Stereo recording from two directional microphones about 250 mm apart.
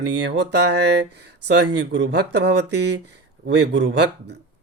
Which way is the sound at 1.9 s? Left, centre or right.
Right.